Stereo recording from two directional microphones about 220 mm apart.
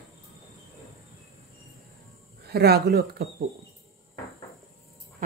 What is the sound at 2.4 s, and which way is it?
Speech, 45° right (ahead or behind).